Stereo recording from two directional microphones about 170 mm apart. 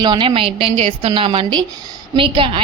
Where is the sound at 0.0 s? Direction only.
30° right (ahead or behind).